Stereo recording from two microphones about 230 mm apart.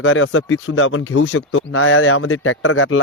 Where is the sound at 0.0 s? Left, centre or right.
Left.